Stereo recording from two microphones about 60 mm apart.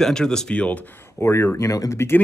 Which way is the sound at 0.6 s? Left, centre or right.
Left.